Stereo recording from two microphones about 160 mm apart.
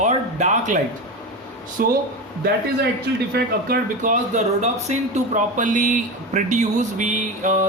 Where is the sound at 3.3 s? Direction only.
60° right (ahead or behind).